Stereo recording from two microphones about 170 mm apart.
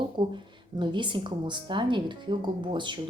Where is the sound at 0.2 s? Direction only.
25° right (ahead or behind).